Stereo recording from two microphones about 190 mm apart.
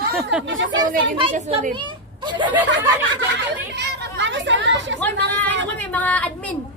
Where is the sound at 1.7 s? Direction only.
25° right (ahead or behind).